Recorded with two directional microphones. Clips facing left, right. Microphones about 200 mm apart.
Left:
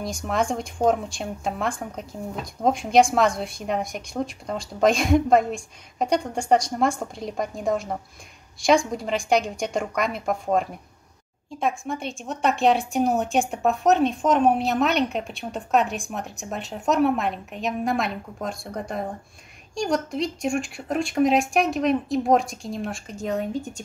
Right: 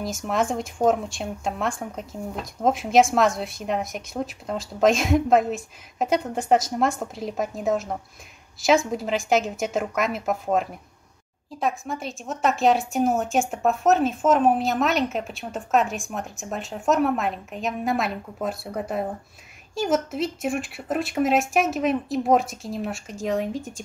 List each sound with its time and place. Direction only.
0.0 s speech: centre (ahead or behind)